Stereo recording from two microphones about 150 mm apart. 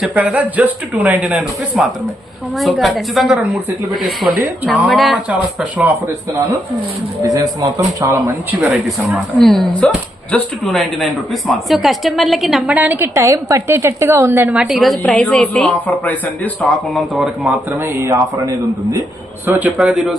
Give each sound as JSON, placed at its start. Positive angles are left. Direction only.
{"t": 0.0, "sound": "a woman's voice", "side_deg": -10}
{"t": 8.1, "sound": "speech", "side_deg": -15}
{"t": 8.7, "sound": "a woman's voice", "side_deg": 0}
{"t": 16.6, "sound": "speech", "side_deg": 0}
{"t": 19.5, "sound": "a woman's voice", "side_deg": -10}